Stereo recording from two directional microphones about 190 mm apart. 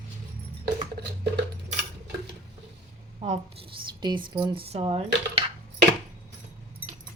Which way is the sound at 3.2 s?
35° right (ahead or behind).